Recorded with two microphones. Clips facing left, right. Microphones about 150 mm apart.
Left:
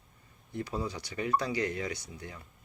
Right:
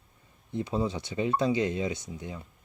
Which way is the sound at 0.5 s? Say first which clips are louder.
Right 5 dB; 25° right (ahead or behind).